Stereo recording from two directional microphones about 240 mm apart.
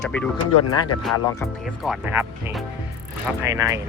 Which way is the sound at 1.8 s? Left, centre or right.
Centre.